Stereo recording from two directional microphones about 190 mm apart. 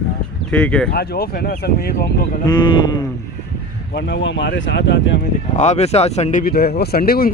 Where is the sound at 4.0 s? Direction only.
70° left (ahead or behind).